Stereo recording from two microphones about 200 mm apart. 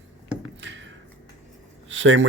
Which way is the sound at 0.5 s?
65° right (ahead or behind).